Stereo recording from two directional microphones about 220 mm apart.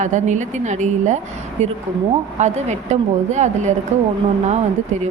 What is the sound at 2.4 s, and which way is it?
A woman's voice, 30° right (ahead or behind).